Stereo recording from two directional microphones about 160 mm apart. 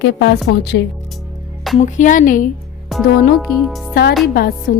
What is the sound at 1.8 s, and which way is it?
Speech, 50° left (ahead or behind).